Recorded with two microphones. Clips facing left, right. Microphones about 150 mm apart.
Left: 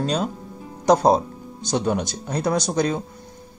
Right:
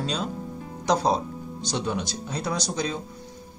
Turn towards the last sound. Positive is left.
turn(degrees=50)  # may be behind; listen again after turning